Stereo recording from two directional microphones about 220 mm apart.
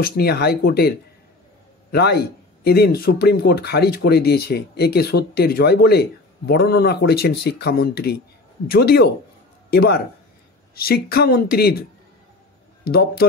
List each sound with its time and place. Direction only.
0.0 s speech: 45° left (ahead or behind)
12.8 s speech: 45° left (ahead or behind)